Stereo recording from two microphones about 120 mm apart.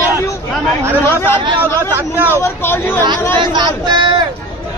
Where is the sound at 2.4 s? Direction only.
20° left (ahead or behind).